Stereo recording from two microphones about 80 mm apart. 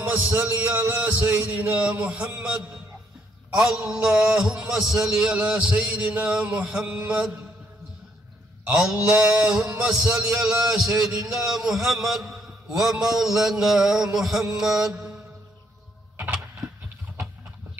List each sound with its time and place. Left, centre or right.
0.0 s a man's voice: right
8.6 s a man's voice: centre
14.6 s mantra: centre